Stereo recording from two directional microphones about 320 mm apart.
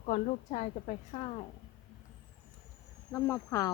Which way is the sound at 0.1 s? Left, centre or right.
Left.